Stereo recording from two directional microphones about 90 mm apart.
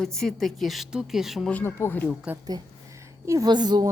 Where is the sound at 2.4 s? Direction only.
40° right (ahead or behind).